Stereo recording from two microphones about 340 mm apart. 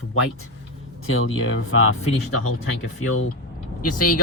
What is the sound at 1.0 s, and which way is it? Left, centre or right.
Speech, left.